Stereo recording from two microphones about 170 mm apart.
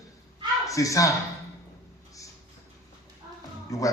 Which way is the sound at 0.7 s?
20° left (ahead or behind).